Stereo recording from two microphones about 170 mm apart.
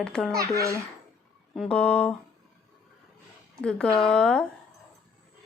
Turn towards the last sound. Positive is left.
turn(degrees=5)  # may be behind; listen again after turning